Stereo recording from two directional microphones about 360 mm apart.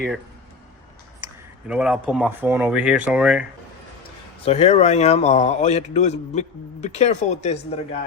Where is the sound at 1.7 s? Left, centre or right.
Centre.